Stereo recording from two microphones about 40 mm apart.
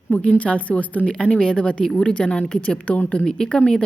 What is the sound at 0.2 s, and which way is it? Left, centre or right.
Speech, left.